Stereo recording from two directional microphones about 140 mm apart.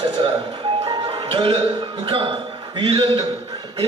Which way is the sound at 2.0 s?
40° right (ahead or behind).